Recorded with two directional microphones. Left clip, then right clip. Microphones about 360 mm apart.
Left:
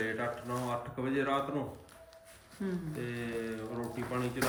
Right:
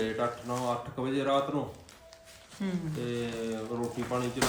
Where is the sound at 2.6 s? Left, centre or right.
Centre.